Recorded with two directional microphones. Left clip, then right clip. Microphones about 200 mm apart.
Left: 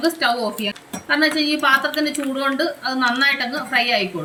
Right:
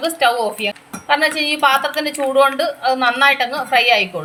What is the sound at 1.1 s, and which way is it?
A woman's voice, 45° right (ahead or behind).